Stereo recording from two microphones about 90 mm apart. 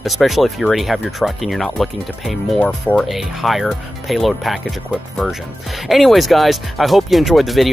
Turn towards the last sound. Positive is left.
turn(degrees=0)  # may be behind; listen again after turning